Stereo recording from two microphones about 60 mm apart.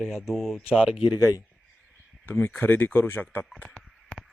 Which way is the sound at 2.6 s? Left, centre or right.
Left.